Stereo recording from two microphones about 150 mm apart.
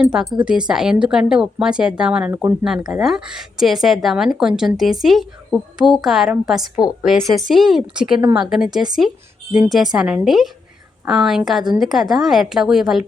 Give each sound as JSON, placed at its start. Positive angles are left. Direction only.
{"t": 0.0, "sound": "speech", "side_deg": -5}
{"t": 2.3, "sound": "speech", "side_deg": -20}
{"t": 2.9, "sound": "speech", "side_deg": -5}